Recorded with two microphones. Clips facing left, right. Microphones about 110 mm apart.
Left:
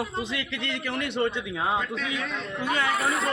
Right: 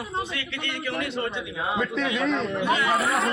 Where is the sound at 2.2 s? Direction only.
40° right (ahead or behind).